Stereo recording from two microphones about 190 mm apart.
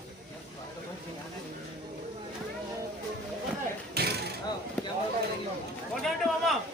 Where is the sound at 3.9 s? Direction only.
55° right (ahead or behind).